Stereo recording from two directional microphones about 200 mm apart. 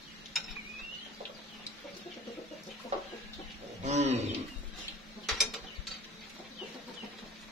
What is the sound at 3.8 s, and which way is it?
Bird, 35° right (ahead or behind).